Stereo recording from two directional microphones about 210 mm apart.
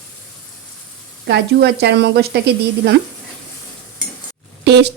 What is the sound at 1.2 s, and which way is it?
Speech, 50° right (ahead or behind).